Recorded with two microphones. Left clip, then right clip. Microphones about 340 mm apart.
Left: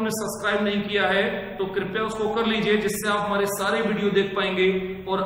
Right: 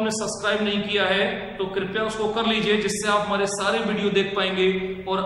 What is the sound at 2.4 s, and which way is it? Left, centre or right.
A man's voice, centre.